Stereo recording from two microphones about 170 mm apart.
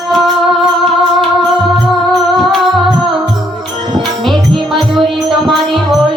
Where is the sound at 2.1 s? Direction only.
Centre (ahead or behind).